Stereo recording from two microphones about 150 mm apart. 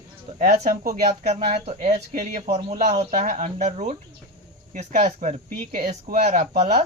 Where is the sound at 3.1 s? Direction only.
55° right (ahead or behind).